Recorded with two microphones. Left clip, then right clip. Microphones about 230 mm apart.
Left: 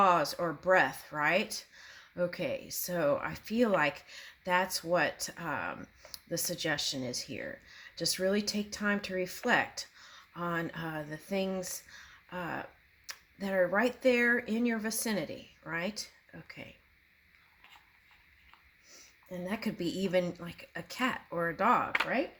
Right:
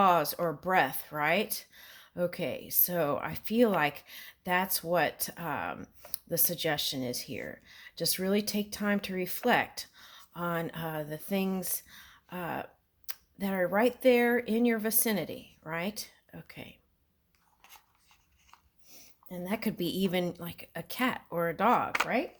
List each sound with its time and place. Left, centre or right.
0.0 s speech: right
18.9 s speech: right